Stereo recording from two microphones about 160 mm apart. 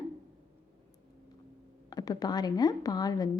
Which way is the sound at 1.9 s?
25° left (ahead or behind).